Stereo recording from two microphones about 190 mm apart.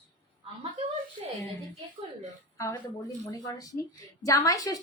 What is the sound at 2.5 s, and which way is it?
A woman's voice, 15° left (ahead or behind).